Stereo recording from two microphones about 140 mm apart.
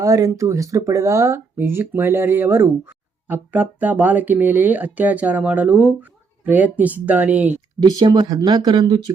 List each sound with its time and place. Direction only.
0.0 s speech: 25° right (ahead or behind)
7.8 s speech: 30° right (ahead or behind)